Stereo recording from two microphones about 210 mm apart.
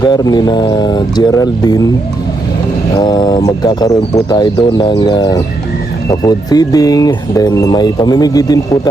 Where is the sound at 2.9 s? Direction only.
20° left (ahead or behind).